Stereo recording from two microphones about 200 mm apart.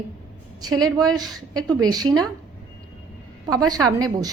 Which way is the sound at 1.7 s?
20° right (ahead or behind).